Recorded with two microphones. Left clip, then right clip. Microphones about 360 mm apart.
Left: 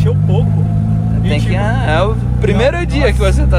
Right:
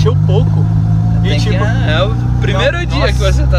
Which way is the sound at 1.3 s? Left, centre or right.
Centre.